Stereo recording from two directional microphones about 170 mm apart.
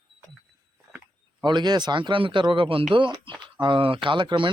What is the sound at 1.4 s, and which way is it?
Speech, 25° right (ahead or behind).